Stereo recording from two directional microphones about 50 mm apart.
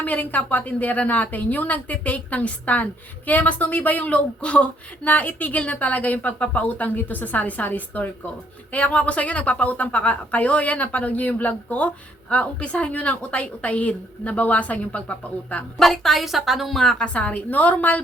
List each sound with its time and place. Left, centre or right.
0.0 s a woman's voice: left
15.8 s speech: centre
16.8 s a woman's voice: centre
17.1 s a woman's voice: left